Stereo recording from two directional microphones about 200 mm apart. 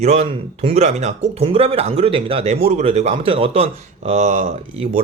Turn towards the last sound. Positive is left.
turn(degrees=-30)  # may be behind; listen again after turning